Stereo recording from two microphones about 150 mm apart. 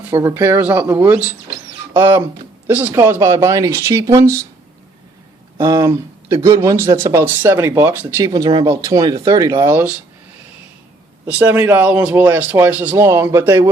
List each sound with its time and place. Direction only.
0.2 s speech: 15° right (ahead or behind)
5.5 s speech: 20° right (ahead or behind)
8.3 s speech: 30° right (ahead or behind)
11.3 s speech: 10° right (ahead or behind)